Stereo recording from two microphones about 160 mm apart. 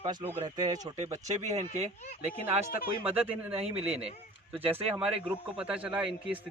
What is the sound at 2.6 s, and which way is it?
Speech, 65° left (ahead or behind).